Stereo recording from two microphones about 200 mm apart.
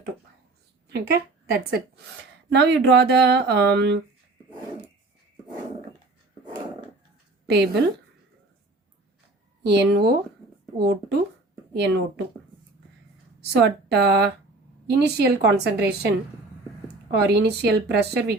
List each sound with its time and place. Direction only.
0.9 s a sound: 50° right (ahead or behind)
2.5 s speech: 60° right (ahead or behind)
7.4 s a woman's voice: 55° right (ahead or behind)
9.6 s speech: 55° right (ahead or behind)
13.5 s speech: 55° right (ahead or behind)